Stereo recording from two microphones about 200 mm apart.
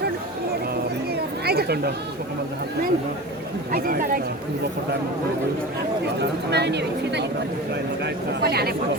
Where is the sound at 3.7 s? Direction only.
45° right (ahead or behind).